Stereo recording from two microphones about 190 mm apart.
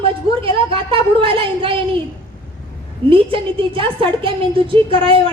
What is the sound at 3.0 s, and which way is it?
A woman's voice, 30° right (ahead or behind).